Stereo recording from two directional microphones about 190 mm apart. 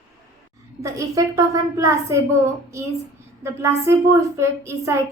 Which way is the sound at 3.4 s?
15° right (ahead or behind).